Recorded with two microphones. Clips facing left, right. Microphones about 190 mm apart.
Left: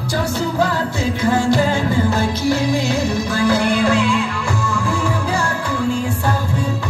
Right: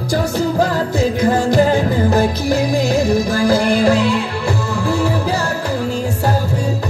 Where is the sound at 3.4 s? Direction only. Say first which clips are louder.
Right 2 dB; 35° right (ahead or behind).